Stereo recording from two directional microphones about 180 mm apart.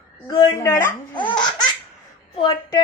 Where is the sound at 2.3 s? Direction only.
25° left (ahead or behind).